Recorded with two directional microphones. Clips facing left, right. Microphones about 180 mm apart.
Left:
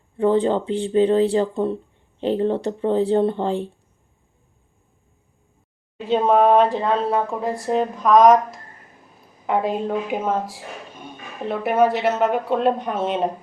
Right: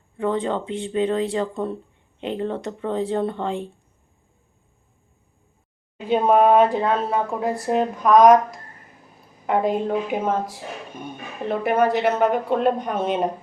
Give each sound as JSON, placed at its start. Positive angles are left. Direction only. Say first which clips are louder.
{"t": 0.2, "sound": "speech", "louder": "left 5 dB", "side_deg": 30}
{"t": 6.1, "sound": "speech", "louder": "even", "side_deg": -5}